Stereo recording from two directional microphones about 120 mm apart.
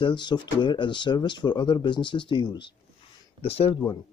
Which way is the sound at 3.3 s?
55° left (ahead or behind).